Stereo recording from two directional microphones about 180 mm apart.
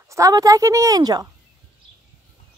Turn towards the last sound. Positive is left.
turn(degrees=-20)  # may be behind; listen again after turning